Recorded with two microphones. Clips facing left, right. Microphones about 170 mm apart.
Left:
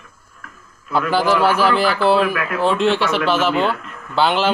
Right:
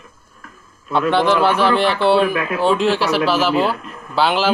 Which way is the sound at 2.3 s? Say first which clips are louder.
Right 2 dB; 30° right (ahead or behind).